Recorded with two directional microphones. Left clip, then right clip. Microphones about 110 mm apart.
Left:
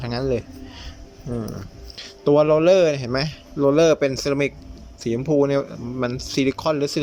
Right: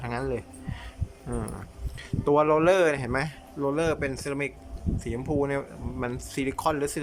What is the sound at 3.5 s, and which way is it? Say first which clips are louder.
Speech: left 10 dB; 35° left (ahead or behind).